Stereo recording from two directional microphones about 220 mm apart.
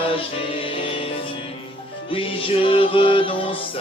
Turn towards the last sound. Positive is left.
turn(degrees=25)  # may be behind; listen again after turning